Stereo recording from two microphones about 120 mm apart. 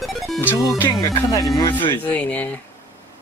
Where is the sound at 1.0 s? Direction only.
30° left (ahead or behind).